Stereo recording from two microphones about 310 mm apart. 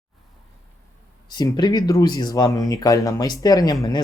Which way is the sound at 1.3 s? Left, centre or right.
Centre.